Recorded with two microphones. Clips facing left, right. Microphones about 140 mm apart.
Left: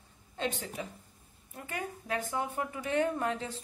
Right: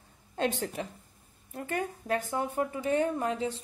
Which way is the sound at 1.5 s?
35° right (ahead or behind).